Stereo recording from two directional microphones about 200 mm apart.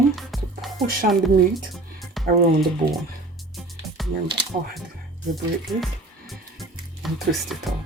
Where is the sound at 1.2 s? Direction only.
Centre (ahead or behind).